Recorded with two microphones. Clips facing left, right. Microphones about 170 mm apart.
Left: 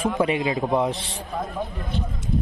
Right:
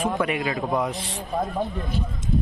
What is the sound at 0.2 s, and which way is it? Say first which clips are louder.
Speech: left 3 dB; 25° left (ahead or behind).